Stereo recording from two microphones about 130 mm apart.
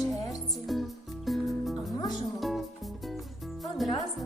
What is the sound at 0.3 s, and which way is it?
Music, centre (ahead or behind).